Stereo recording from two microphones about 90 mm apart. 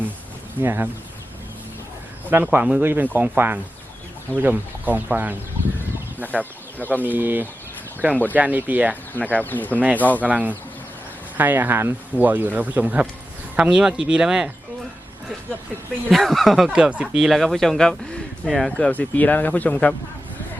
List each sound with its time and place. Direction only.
0.6 s speech: 25° right (ahead or behind)
2.3 s speech: 20° right (ahead or behind)
6.4 s speech: 20° left (ahead or behind)
7.0 s speech: 20° right (ahead or behind)
9.1 s speech: 20° left (ahead or behind)
10.2 s speech: 15° right (ahead or behind)
16.0 s speech: centre (ahead or behind)
18.8 s speech: 15° left (ahead or behind)